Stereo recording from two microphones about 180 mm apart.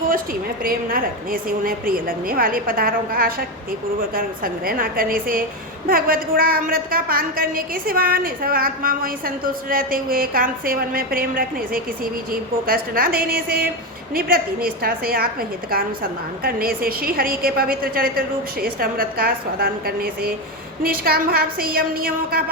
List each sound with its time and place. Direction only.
0.6 s a woman's voice: 55° right (ahead or behind)